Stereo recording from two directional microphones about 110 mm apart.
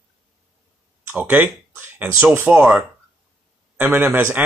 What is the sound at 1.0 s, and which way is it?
Speech, 15° right (ahead or behind).